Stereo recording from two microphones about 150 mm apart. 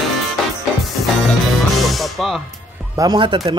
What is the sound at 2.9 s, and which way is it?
Speech, 30° right (ahead or behind).